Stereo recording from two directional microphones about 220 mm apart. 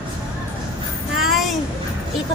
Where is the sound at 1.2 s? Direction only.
Centre (ahead or behind).